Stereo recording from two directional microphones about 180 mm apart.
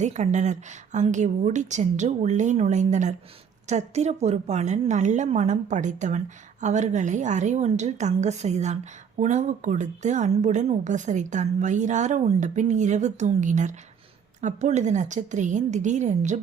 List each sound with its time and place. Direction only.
0.0 s a woman's voice: 40° right (ahead or behind)